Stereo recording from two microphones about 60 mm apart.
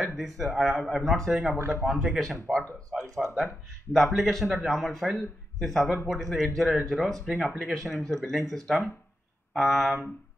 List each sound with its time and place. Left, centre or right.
0.0 s a man's voice: centre
2.5 s speech: centre
2.9 s a man's voice: centre